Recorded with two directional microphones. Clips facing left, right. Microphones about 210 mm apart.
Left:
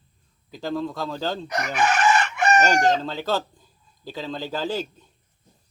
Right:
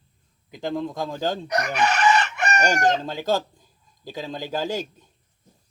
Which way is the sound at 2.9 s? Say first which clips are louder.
Even; 15° right (ahead or behind).